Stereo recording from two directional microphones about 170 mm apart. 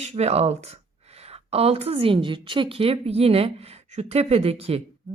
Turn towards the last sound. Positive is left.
turn(degrees=-35)  # may be behind; listen again after turning